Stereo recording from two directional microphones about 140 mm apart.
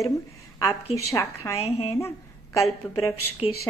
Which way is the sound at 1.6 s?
50° left (ahead or behind).